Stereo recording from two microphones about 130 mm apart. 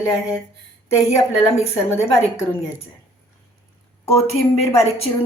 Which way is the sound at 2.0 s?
55° left (ahead or behind).